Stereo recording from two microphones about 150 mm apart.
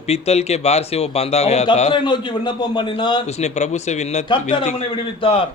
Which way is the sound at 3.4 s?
50° left (ahead or behind).